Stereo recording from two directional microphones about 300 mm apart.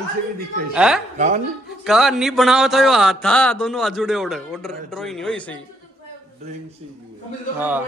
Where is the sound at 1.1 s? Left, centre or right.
Right.